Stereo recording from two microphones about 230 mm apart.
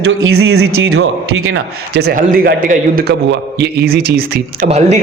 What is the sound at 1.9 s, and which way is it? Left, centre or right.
A man's voice, right.